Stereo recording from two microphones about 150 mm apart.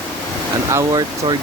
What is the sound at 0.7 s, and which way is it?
Speech, 25° right (ahead or behind).